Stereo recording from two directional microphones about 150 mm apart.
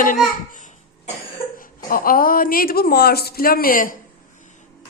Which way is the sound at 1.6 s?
70° left (ahead or behind).